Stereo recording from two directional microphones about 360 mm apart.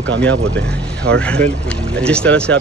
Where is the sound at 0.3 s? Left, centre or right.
Right.